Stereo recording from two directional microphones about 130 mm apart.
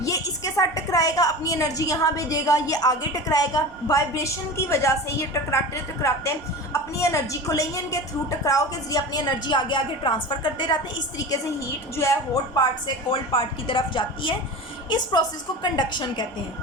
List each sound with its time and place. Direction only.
0.0 s a woman's voice: 25° left (ahead or behind)
11.9 s a woman's voice: 25° left (ahead or behind)
13.1 s speech: 40° left (ahead or behind)